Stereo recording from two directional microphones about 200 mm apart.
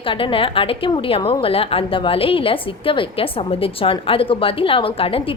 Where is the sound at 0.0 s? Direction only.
25° left (ahead or behind).